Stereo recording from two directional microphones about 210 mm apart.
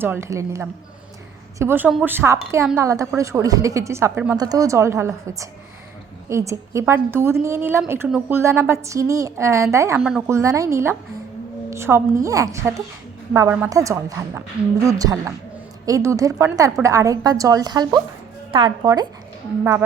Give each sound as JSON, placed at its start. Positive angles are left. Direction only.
{"t": 0.0, "sound": "a woman's voice", "side_deg": -10}